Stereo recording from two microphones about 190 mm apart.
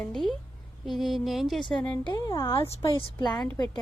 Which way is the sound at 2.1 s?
20° left (ahead or behind).